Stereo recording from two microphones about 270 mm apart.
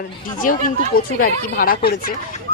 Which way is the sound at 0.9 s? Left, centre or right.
Left.